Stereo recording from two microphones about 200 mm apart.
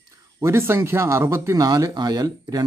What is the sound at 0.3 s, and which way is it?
Speech, 15° right (ahead or behind).